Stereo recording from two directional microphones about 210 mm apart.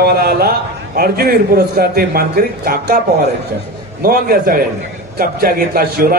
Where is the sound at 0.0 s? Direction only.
50° right (ahead or behind).